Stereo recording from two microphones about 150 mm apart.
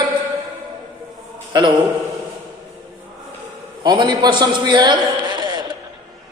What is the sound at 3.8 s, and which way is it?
A man's voice, 30° right (ahead or behind).